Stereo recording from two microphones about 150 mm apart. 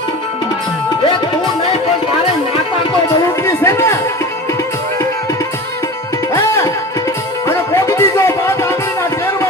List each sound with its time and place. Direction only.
3.4 s music: 20° left (ahead or behind)
7.4 s music: 20° left (ahead or behind)